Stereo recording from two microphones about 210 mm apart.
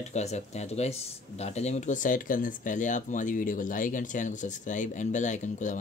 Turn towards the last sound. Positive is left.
turn(degrees=35)  # may be behind; listen again after turning